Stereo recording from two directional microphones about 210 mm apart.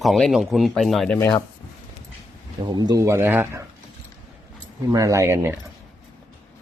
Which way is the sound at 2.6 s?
20° right (ahead or behind).